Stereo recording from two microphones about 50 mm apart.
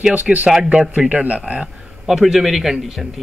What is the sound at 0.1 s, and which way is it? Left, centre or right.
Speech, right.